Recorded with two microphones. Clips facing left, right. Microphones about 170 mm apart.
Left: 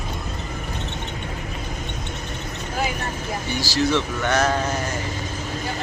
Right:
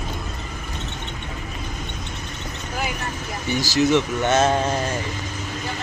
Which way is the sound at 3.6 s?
20° right (ahead or behind).